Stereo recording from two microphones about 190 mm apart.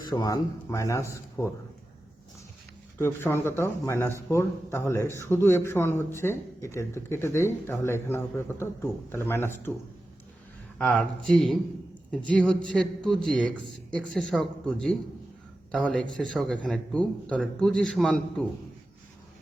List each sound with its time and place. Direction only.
0.0 s a man's voice: 20° left (ahead or behind)
3.0 s a man's voice: 10° left (ahead or behind)
10.8 s a man's voice: 5° left (ahead or behind)